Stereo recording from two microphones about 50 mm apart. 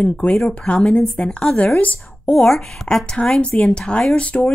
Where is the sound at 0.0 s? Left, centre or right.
Left.